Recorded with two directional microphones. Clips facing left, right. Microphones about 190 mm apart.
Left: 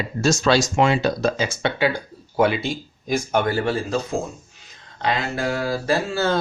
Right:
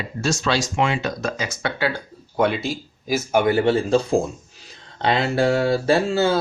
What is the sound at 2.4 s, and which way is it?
Speech, centre (ahead or behind).